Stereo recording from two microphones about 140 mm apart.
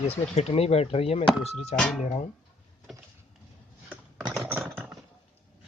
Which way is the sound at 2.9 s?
Centre (ahead or behind).